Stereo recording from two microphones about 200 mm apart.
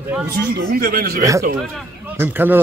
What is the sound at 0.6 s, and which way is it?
Speech, 50° right (ahead or behind).